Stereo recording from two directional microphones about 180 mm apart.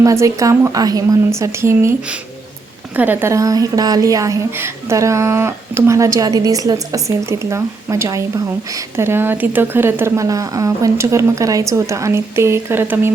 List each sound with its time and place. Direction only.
0.0 s a woman's voice: 15° right (ahead or behind)